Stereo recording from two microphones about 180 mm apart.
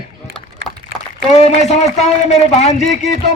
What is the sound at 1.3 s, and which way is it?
A man's voice, 40° left (ahead or behind).